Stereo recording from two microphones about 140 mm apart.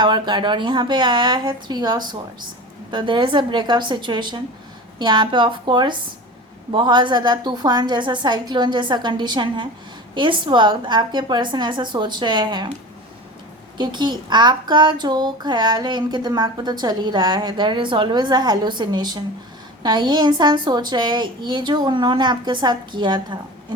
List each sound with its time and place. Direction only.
0.0 s speech: 35° right (ahead or behind)
13.7 s speech: 35° right (ahead or behind)